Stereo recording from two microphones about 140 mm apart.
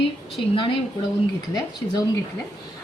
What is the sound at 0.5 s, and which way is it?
A woman's voice, 40° left (ahead or behind).